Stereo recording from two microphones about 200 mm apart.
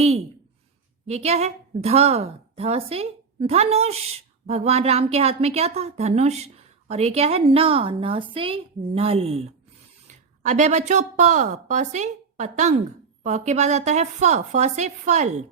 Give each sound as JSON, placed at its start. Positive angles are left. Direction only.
{"t": 1.0, "sound": "a woman's voice", "side_deg": -30}